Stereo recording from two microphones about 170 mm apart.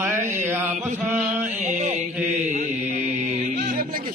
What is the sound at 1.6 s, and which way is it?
Mantra, 40° right (ahead or behind).